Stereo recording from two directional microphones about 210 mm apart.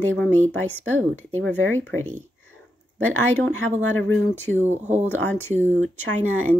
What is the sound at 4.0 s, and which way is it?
Speech, 10° left (ahead or behind).